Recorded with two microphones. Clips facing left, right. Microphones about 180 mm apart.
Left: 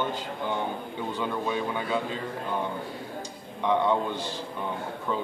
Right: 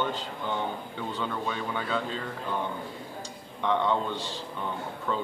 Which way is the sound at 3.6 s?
10° left (ahead or behind).